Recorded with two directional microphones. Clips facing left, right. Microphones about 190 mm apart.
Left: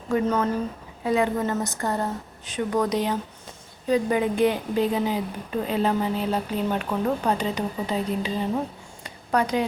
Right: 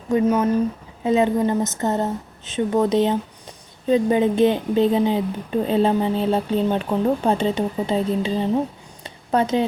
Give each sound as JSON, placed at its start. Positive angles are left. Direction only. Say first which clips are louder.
{"t": 0.3, "sound": "speech", "louder": "right 5 dB", "side_deg": -10}
{"t": 1.0, "sound": "speech", "louder": "right 5 dB", "side_deg": -20}
{"t": 9.0, "sound": "a sound", "louder": "right 4 dB", "side_deg": -25}